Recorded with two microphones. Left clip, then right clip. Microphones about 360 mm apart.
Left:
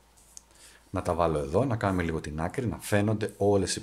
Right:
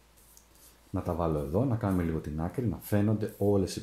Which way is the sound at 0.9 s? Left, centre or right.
Left.